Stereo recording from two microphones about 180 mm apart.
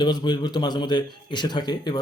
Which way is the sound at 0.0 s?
25° left (ahead or behind).